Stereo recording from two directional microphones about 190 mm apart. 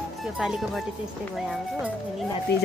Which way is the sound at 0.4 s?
Centre (ahead or behind).